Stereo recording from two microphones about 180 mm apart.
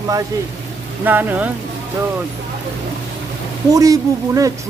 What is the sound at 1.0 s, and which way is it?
Speech, 10° right (ahead or behind).